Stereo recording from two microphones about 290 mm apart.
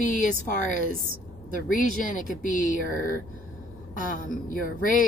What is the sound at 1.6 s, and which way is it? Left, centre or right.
Speech, left.